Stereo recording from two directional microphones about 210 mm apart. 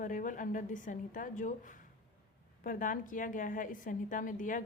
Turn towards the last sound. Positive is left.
turn(degrees=40)  # may be behind; listen again after turning